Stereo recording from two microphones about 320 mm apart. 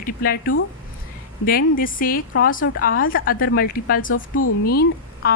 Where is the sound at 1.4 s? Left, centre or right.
Left.